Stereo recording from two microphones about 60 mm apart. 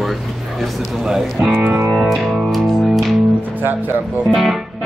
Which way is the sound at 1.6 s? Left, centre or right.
Right.